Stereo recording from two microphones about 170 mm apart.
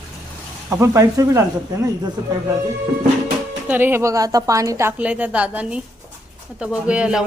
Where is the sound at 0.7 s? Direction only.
15° right (ahead or behind).